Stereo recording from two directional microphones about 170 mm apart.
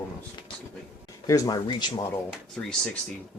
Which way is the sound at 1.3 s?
25° left (ahead or behind).